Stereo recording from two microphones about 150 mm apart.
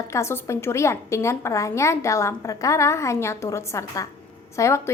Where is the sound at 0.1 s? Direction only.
20° left (ahead or behind).